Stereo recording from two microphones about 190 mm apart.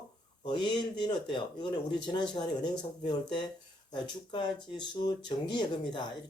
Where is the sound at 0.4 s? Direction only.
25° left (ahead or behind).